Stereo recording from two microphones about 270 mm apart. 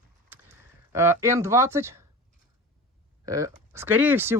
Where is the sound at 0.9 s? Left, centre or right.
Centre.